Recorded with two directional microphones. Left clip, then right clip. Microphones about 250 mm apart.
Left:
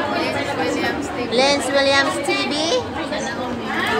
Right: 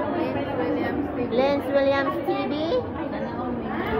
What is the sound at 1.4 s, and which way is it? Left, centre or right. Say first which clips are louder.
Speech: left 5 dB; centre.